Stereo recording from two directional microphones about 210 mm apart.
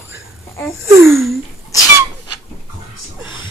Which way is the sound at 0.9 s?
10° right (ahead or behind).